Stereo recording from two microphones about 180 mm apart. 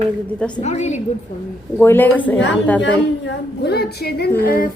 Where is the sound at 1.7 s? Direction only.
10° left (ahead or behind).